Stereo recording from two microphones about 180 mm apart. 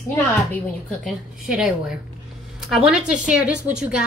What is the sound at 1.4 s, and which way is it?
A woman's voice, 5° right (ahead or behind).